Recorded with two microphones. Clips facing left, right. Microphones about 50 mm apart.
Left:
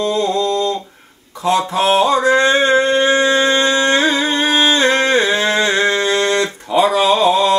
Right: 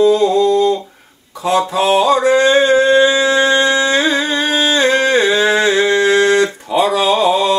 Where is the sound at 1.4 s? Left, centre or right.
Right.